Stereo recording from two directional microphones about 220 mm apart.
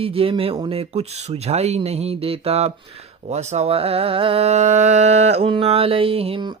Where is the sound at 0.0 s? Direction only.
25° right (ahead or behind).